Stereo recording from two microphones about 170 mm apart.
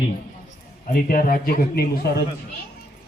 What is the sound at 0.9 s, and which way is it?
A man's voice, 55° left (ahead or behind).